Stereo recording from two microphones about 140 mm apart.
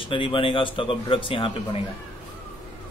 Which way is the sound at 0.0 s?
40° left (ahead or behind).